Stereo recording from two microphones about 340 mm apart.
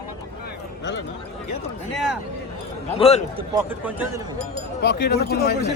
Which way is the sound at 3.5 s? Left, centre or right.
Centre.